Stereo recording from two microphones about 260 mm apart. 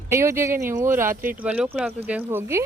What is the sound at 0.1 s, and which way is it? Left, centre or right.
Speech, centre.